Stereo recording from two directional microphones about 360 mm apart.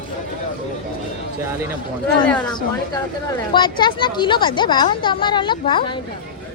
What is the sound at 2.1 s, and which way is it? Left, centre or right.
Speech, centre.